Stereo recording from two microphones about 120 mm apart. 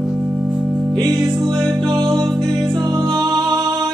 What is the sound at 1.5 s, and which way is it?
Music, 5° left (ahead or behind).